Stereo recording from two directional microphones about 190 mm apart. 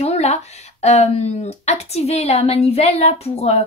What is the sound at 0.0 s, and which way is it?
Speech, 35° left (ahead or behind).